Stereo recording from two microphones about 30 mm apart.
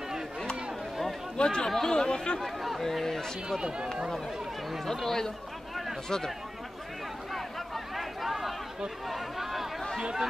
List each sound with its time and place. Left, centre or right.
1.3 s speech: left
2.4 s speech: centre
2.8 s speech: centre
3.6 s speech: right
5.0 s speech: centre
7.3 s a sound: centre
9.1 s chatter: centre